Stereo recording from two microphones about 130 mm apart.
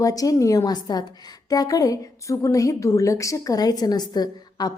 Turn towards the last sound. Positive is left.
turn(degrees=30)  # may be behind; listen again after turning